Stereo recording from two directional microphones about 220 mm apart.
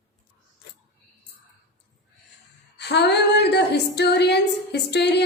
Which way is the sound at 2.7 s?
50° left (ahead or behind).